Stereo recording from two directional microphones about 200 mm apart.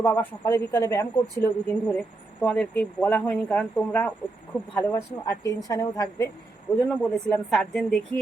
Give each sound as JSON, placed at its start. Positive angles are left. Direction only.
{"t": 0.0, "sound": "a woman's voice", "side_deg": 10}
{"t": 6.8, "sound": "speech", "side_deg": 5}